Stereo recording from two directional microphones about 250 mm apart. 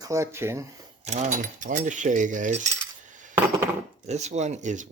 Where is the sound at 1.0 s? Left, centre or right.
Right.